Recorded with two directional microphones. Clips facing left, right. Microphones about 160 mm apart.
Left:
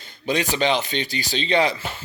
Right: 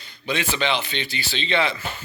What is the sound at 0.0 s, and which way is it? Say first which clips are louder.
Speech: left 3 dB; 40° left (ahead or behind).